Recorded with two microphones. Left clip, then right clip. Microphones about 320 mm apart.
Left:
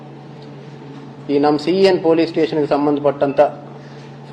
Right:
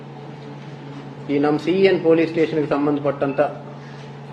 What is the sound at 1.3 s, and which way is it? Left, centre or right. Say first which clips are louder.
A man's voice: left 4 dB; left.